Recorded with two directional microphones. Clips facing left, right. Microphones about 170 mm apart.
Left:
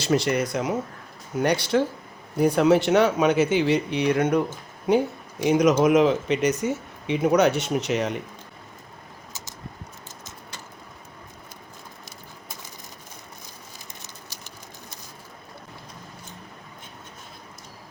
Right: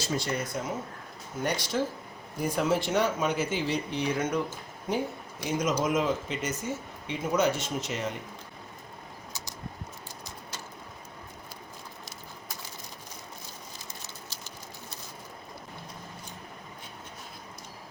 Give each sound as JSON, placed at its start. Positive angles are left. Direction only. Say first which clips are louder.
{"t": 0.0, "sound": "speech", "louder": "left 9 dB", "side_deg": 75}
{"t": 14.0, "sound": "bird", "louder": "even", "side_deg": 15}